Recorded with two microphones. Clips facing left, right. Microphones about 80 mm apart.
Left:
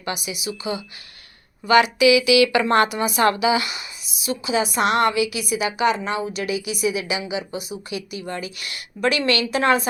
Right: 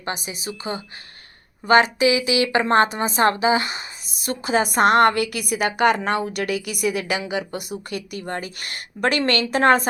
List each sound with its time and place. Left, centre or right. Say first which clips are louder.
0.0 s a woman's voice: left 1 dB; right